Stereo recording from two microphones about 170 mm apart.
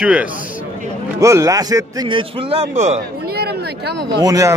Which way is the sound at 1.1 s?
20° right (ahead or behind).